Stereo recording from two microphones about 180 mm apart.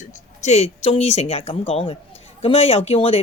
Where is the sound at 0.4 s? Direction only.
35° left (ahead or behind).